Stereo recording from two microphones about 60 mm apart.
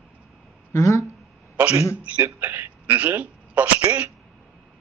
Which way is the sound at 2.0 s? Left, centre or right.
Right.